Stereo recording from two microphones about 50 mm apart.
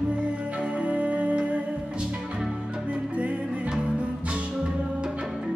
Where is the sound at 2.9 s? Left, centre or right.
Right.